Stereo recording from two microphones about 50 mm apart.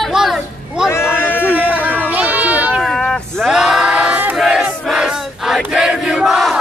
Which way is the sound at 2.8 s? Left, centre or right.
Centre.